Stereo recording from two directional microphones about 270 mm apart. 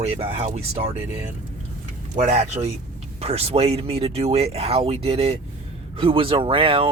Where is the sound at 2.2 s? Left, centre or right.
Right.